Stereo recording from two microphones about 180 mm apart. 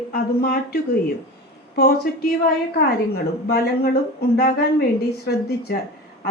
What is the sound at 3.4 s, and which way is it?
Speech, 60° left (ahead or behind).